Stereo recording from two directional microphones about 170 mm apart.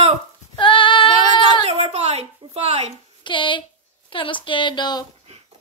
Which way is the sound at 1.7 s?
40° right (ahead or behind).